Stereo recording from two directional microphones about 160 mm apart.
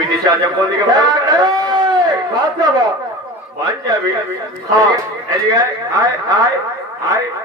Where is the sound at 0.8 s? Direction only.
25° right (ahead or behind).